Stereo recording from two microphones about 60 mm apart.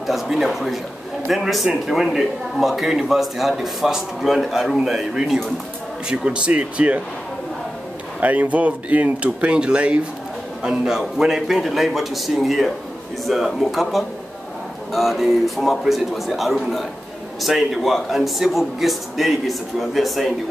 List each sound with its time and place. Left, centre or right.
0.0 s a man's voice: centre; by 7.0 s right
8.2 s a man's voice: right; by 20.3 s centre